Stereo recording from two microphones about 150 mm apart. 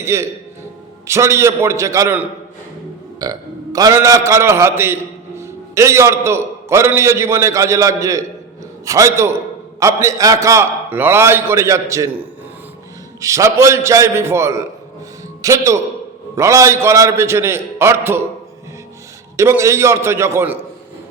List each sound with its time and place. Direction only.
0.0 s a man's voice: 20° right (ahead or behind)
13.2 s a man's voice: 20° right (ahead or behind)
19.4 s a man's voice: 20° right (ahead or behind)